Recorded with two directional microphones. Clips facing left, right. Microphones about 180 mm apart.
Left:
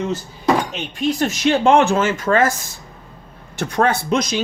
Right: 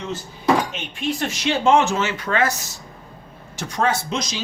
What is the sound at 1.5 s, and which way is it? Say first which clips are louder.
Speech: left 3 dB; 60° left (ahead or behind).